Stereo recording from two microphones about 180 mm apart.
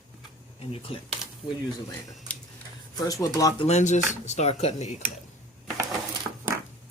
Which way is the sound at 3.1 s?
20° left (ahead or behind).